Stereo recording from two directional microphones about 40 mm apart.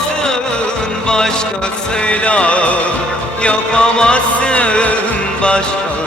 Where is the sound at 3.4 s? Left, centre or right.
Left.